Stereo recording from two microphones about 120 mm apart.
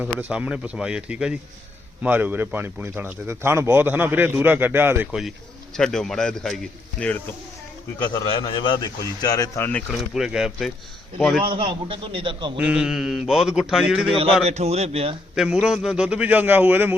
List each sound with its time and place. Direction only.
0.2 s speech: 10° right (ahead or behind)
5.7 s speech: 5° left (ahead or behind)
7.9 s a man's voice: 35° left (ahead or behind)
9.6 s speech: 15° left (ahead or behind)
10.0 s speech: 5° right (ahead or behind)
11.4 s a man's voice: 45° right (ahead or behind)
12.5 s speech: 10° right (ahead or behind)
14.4 s a man's voice: 60° right (ahead or behind)
15.6 s speech: 5° right (ahead or behind)